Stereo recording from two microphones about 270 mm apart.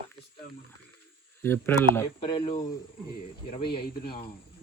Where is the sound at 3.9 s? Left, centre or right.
Left.